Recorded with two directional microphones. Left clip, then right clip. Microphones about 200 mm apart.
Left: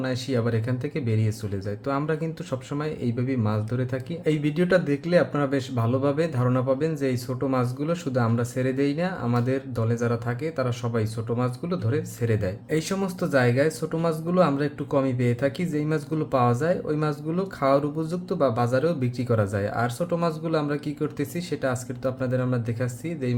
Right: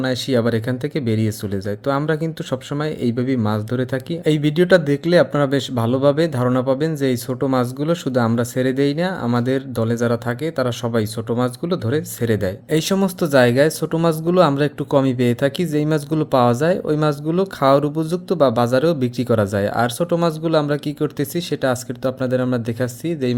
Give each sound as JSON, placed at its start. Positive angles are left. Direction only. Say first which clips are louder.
{"t": 0.0, "sound": "speech", "louder": "right 8 dB", "side_deg": -40}